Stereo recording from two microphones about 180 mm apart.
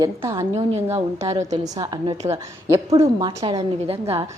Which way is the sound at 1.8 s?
25° right (ahead or behind).